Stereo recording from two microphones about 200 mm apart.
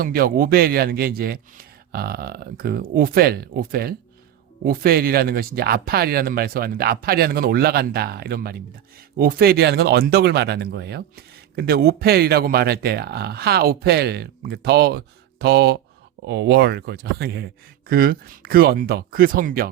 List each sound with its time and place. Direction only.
0.0 s speech: 45° right (ahead or behind)